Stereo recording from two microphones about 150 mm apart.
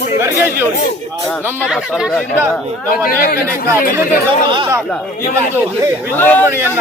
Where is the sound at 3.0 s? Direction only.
75° left (ahead or behind).